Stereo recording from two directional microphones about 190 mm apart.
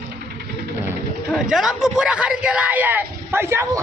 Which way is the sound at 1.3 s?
5° right (ahead or behind).